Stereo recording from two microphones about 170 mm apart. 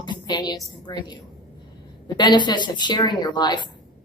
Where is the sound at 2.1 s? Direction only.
25° left (ahead or behind).